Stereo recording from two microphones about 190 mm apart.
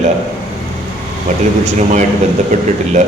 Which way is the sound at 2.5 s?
40° right (ahead or behind).